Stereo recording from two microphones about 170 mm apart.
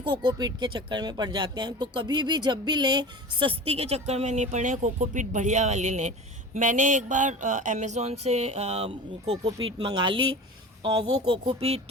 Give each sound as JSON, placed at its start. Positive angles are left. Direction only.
{"t": 0.0, "sound": "speech", "side_deg": -30}